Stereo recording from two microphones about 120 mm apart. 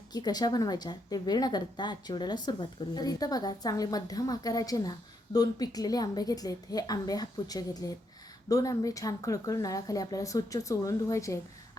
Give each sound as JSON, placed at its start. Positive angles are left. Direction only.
{"t": 0.1, "sound": "a woman's voice", "side_deg": 35}